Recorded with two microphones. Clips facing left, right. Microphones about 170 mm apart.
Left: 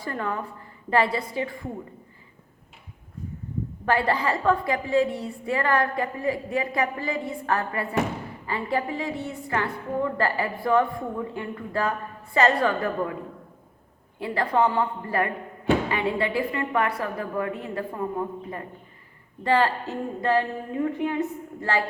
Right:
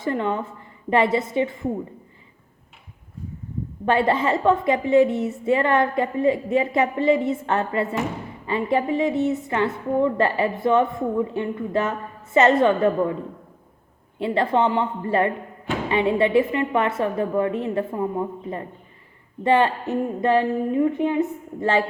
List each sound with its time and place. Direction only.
0.0 s a woman's voice: 20° right (ahead or behind)
3.8 s a woman's voice: 25° right (ahead or behind)
14.2 s a woman's voice: 25° right (ahead or behind)
19.4 s a woman's voice: 20° right (ahead or behind)